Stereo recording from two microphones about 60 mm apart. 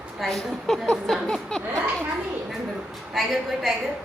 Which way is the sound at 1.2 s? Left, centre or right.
Centre.